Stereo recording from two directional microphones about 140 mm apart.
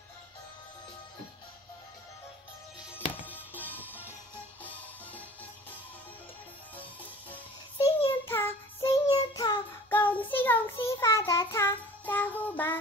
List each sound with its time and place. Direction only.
3.3 s music: 15° left (ahead or behind)
7.8 s child singing: 15° left (ahead or behind)
9.8 s child singing: 10° left (ahead or behind)